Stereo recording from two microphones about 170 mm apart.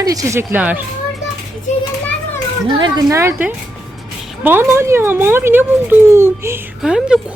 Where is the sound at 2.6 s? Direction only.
30° right (ahead or behind).